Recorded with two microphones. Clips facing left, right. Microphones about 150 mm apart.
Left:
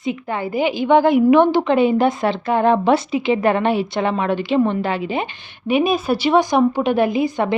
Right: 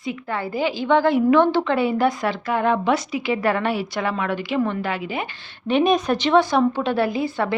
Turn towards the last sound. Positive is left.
turn(degrees=20)  # may be behind; listen again after turning